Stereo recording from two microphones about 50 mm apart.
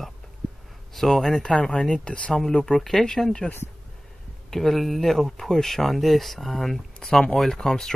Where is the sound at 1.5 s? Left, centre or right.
Centre.